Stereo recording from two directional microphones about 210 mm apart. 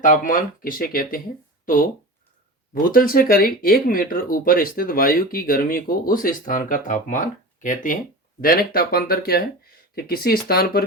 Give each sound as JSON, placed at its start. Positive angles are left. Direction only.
{"t": 0.0, "sound": "speech", "side_deg": 40}